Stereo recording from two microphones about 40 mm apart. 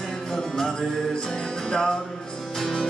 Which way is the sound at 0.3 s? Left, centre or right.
Centre.